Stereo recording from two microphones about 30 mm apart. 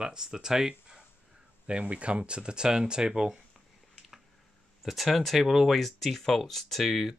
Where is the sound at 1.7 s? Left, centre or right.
Right.